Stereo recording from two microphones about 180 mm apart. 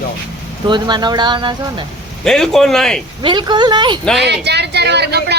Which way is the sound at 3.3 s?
25° right (ahead or behind).